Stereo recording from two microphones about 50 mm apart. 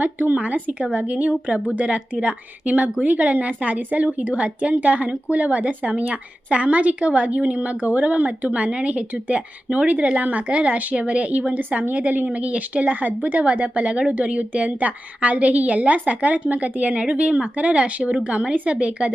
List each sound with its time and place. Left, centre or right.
0.0 s a woman's voice: right